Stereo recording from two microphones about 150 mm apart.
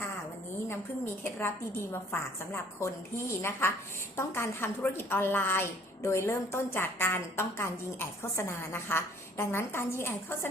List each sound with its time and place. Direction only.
1.2 s a woman's voice: 15° left (ahead or behind)